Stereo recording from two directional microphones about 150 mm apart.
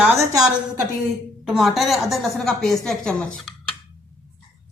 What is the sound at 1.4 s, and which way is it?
Speech, centre (ahead or behind).